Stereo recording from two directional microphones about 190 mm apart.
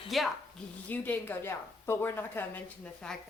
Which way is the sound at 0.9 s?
10° left (ahead or behind).